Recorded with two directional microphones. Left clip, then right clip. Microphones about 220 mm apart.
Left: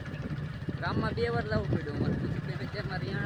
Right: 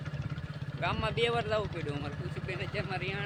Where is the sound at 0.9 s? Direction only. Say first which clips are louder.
Right 1 dB; 10° right (ahead or behind).